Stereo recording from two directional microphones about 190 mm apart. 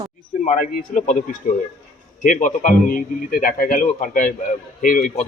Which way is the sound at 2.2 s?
40° left (ahead or behind).